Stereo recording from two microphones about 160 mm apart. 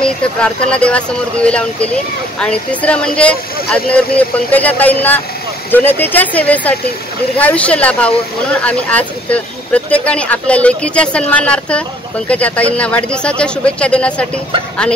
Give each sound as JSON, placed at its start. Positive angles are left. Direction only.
{"t": 0.0, "sound": "speech", "side_deg": 5}